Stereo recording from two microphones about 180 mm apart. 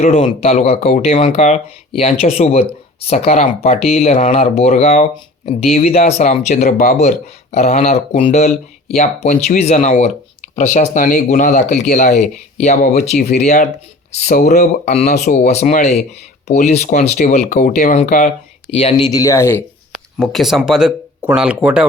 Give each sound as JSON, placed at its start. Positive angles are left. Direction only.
{"t": 0.0, "sound": "speech", "side_deg": 35}
{"t": 18.7, "sound": "speech", "side_deg": 30}
{"t": 19.9, "sound": "speech", "side_deg": 0}